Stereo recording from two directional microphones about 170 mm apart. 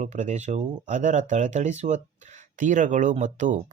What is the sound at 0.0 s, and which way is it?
Speech, 45° right (ahead or behind).